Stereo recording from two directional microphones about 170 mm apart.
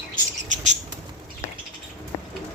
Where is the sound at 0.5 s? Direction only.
45° right (ahead or behind).